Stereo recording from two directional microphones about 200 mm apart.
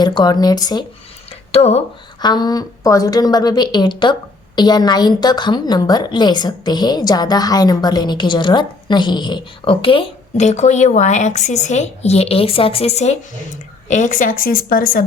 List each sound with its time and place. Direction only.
0.0 s a woman's voice: 20° left (ahead or behind)
1.5 s speech: 30° left (ahead or behind)
2.2 s a woman's voice: 20° left (ahead or behind); by 15.0 s 45° left (ahead or behind)